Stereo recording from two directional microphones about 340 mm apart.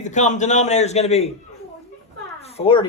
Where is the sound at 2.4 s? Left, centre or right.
Centre.